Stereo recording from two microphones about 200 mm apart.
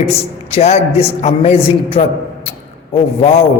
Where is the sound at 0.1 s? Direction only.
30° left (ahead or behind).